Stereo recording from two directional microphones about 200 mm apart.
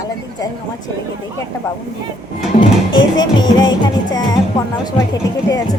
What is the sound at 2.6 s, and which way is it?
Music, 20° left (ahead or behind).